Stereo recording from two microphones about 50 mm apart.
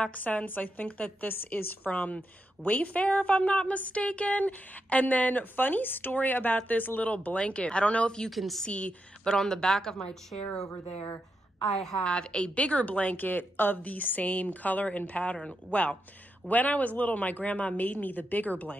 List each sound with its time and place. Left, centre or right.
0.0 s a woman's voice: left
7.1 s speech: left
8.3 s a woman's voice: centre
8.6 s speech: left
9.2 s a woman's voice: centre
11.6 s a woman's voice: centre
12.0 s a woman's voice: centre; by 18.8 s left